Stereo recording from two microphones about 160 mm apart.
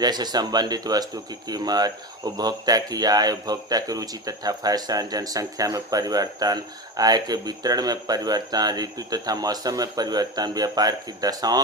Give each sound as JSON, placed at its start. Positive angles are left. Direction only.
{"t": 0.0, "sound": "speech", "side_deg": -25}